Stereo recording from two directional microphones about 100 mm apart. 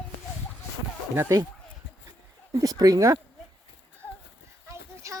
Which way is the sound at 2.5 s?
40° right (ahead or behind).